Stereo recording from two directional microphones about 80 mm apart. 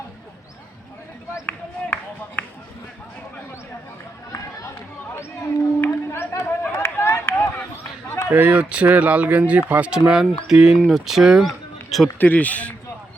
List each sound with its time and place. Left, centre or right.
1.3 s a sound: left
5.4 s chatter: left
8.3 s speech: centre
10.1 s speech: centre
12.0 s speech: left